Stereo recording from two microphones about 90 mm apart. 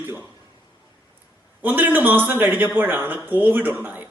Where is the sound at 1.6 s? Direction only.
20° right (ahead or behind).